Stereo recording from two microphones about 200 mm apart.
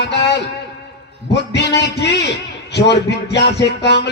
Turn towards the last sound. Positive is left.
turn(degrees=55)  # may be behind; listen again after turning